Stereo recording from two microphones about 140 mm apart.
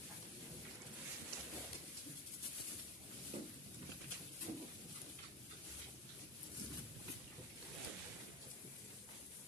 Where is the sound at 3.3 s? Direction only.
45° right (ahead or behind).